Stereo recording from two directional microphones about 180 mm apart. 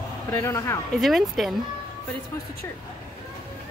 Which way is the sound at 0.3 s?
15° left (ahead or behind).